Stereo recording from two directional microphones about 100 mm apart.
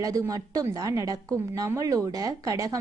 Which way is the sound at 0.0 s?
35° right (ahead or behind).